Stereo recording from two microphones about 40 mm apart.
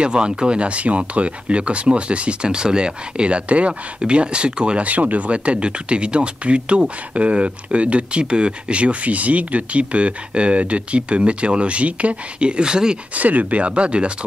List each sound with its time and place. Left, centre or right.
0.0 s speech: right
4.8 s speech: right
13.1 s speech: right